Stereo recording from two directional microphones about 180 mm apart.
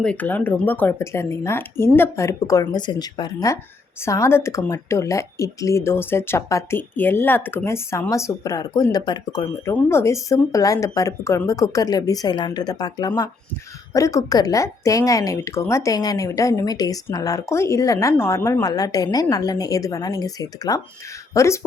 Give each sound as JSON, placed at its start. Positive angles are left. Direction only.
{"t": 0.0, "sound": "speech", "side_deg": 5}